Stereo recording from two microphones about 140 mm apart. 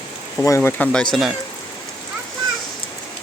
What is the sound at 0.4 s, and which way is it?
Speech, 20° left (ahead or behind).